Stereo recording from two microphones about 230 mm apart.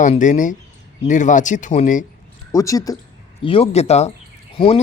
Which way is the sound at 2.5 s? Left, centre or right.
Centre.